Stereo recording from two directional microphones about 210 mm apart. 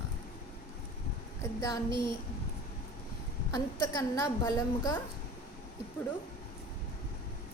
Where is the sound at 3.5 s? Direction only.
15° left (ahead or behind).